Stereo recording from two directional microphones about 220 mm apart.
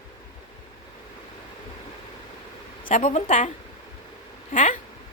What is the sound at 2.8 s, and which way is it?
Speech, 35° left (ahead or behind).